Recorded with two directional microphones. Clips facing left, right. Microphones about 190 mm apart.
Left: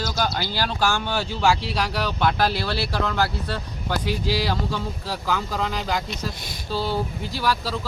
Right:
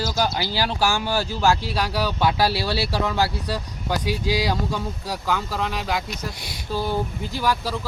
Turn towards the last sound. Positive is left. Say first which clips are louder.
# right 1 dB
turn(degrees=-20)  # may be behind; listen again after turning